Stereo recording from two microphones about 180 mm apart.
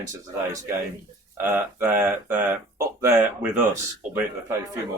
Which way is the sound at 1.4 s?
10° right (ahead or behind).